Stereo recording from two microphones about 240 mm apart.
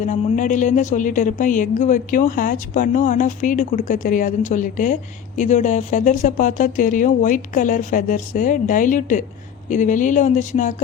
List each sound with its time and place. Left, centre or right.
0.0 s speech: left